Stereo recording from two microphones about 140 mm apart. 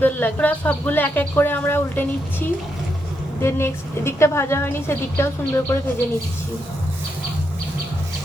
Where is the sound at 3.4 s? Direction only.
20° left (ahead or behind).